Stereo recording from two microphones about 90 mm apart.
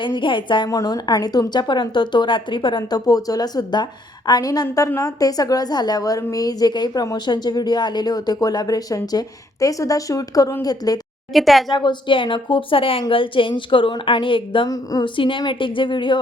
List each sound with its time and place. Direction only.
0.0 s a woman's voice: 65° left (ahead or behind)
0.7 s speech: 40° left (ahead or behind)
11.3 s speech: centre (ahead or behind)
11.7 s a woman's voice: 60° left (ahead or behind)
14.7 s speech: 45° left (ahead or behind)
15.0 s a woman's voice: 70° left (ahead or behind)